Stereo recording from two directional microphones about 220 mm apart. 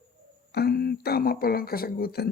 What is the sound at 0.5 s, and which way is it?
Speech, 45° left (ahead or behind).